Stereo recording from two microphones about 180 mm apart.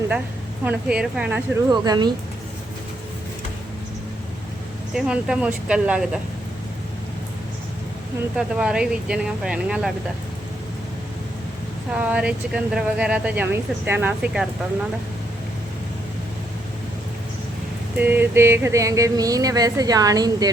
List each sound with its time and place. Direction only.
0.6 s speech: 5° right (ahead or behind)
1.7 s speech: 20° right (ahead or behind)
4.9 s speech: 5° right (ahead or behind)
8.4 s speech: 5° right (ahead or behind)
11.9 s speech: 5° right (ahead or behind)
17.9 s speech: 10° right (ahead or behind)